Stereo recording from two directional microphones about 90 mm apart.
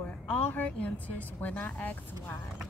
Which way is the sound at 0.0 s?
15° left (ahead or behind).